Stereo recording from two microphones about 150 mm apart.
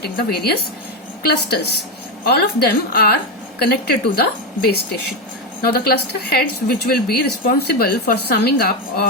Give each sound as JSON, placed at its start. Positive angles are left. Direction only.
{"t": 0.0, "sound": "a woman's voice", "side_deg": 90}